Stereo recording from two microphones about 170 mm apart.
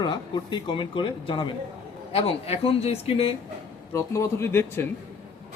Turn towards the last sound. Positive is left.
turn(degrees=15)  # may be behind; listen again after turning